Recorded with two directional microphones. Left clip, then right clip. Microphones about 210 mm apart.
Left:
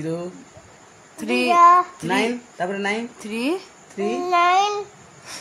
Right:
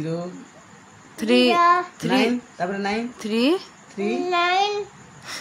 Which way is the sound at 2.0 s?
35° left (ahead or behind).